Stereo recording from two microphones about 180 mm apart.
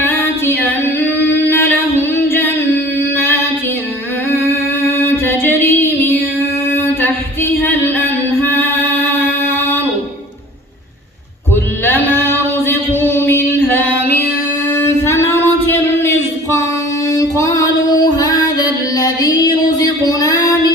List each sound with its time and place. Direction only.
1.5 s singing: 10° left (ahead or behind)
4.9 s music: 10° left (ahead or behind)
6.7 s a sound: 10° left (ahead or behind)
11.9 s a sound: 10° left (ahead or behind)
14.7 s singing: 15° left (ahead or behind)
17.1 s music: 20° left (ahead or behind)